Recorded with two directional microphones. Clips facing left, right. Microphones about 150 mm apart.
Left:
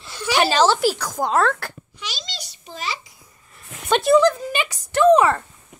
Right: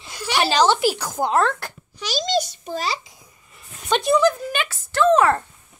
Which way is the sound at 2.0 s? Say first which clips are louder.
Right 14 dB; 40° right (ahead or behind).